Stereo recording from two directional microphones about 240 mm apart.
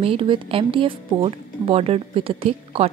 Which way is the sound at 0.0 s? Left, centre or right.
Right.